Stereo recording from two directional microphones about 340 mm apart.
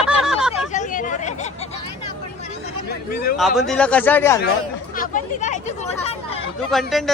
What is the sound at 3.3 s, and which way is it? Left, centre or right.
Speech, centre.